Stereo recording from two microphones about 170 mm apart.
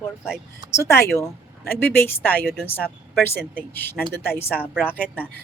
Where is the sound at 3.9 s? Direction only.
10° left (ahead or behind).